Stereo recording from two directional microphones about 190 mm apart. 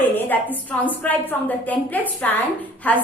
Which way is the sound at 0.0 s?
10° left (ahead or behind).